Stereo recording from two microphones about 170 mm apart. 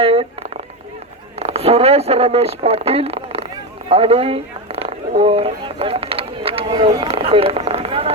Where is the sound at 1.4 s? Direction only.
35° right (ahead or behind).